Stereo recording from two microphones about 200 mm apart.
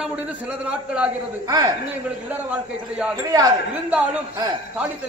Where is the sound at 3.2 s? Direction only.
20° right (ahead or behind).